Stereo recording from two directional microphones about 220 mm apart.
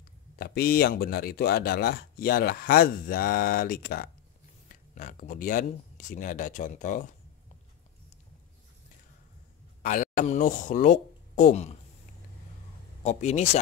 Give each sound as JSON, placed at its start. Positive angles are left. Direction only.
{"t": 0.4, "sound": "speech", "side_deg": 45}
{"t": 9.8, "sound": "speech", "side_deg": 35}
{"t": 13.0, "sound": "speech", "side_deg": 30}